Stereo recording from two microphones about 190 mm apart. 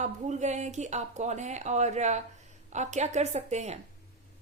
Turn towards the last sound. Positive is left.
turn(degrees=-35)  # may be behind; listen again after turning